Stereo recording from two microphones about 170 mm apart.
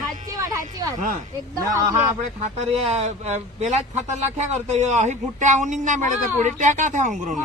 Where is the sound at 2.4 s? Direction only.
40° right (ahead or behind).